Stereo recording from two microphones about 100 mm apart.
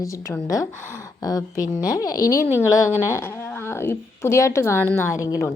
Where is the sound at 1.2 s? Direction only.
35° left (ahead or behind).